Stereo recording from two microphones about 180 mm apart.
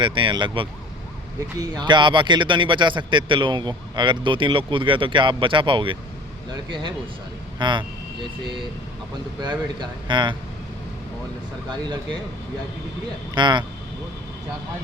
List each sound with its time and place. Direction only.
0.0 s speech: 25° right (ahead or behind)
9.4 s speech: 25° right (ahead or behind)
13.3 s speech: 25° right (ahead or behind)